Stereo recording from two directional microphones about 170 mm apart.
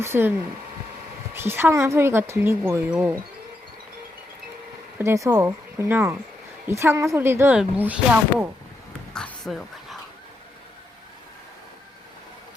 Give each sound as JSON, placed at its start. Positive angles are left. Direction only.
{"t": 0.0, "sound": "speech", "side_deg": -15}
{"t": 4.9, "sound": "speech", "side_deg": -15}
{"t": 9.1, "sound": "dog", "side_deg": 5}